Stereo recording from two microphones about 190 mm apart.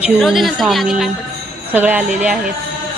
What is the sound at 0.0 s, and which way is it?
A woman's voice, centre (ahead or behind).